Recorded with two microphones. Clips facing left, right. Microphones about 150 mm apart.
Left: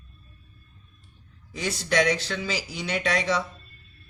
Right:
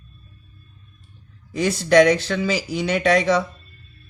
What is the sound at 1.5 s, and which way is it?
Speech, 55° right (ahead or behind).